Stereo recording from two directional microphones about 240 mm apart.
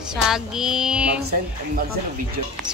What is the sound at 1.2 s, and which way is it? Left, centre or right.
Speech, right.